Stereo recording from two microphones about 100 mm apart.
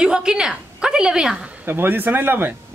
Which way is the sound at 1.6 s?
20° right (ahead or behind).